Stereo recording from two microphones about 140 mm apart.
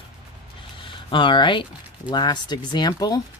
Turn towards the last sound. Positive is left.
turn(degrees=30)  # may be behind; listen again after turning